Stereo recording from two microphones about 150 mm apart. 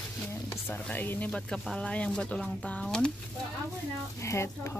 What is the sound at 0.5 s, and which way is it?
Speech, 10° left (ahead or behind).